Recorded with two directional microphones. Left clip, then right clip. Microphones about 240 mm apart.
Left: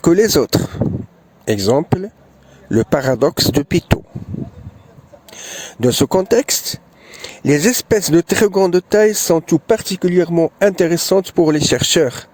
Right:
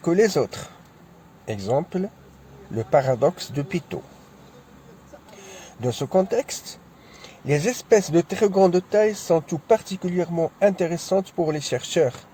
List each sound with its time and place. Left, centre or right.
0.0 s speech: left
5.4 s speech: left